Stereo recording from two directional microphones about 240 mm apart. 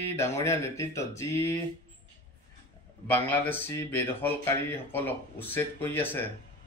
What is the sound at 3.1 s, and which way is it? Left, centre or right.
Speech, centre.